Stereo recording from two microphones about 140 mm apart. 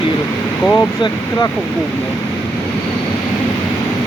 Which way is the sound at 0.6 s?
10° left (ahead or behind).